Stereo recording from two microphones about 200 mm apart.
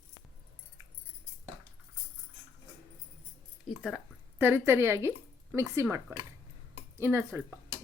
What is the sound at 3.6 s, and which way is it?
Speech, centre (ahead or behind).